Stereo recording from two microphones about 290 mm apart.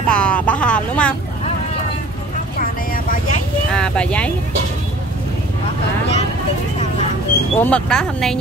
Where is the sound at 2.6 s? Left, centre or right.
Left.